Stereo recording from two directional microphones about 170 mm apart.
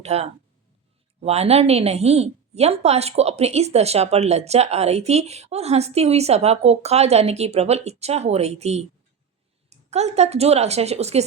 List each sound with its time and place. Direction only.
0.0 s a woman's voice: 40° right (ahead or behind)